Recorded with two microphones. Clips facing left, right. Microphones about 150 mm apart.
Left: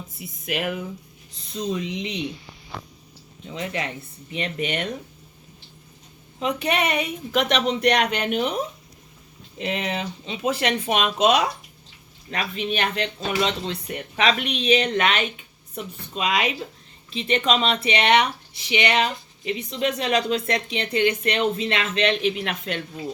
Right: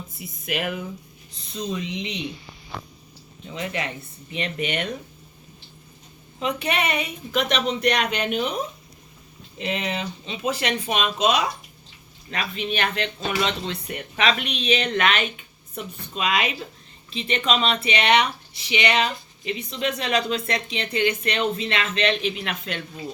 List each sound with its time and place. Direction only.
1.8 s speech: 45° left (ahead or behind)
3.5 s speech: 30° left (ahead or behind)
6.4 s speech: 40° left (ahead or behind)
7.3 s speech: 80° left; by 8.5 s 60° left (ahead or behind)
9.6 s speech: 45° left (ahead or behind); by 11.4 s 65° left (ahead or behind)
12.3 s speech: 40° left (ahead or behind)
14.4 s speech: 50° left (ahead or behind)